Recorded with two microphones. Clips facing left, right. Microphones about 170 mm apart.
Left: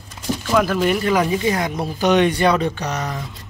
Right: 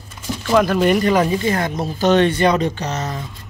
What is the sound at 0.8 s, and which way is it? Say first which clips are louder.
Speech: right 3 dB; centre (ahead or behind).